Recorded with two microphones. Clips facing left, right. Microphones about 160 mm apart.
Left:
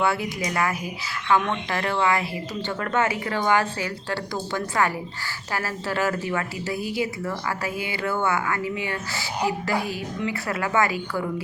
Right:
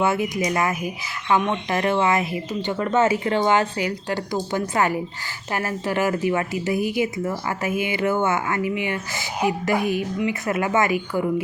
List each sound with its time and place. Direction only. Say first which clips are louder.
0.0 s speech: right 3 dB; 20° right (ahead or behind)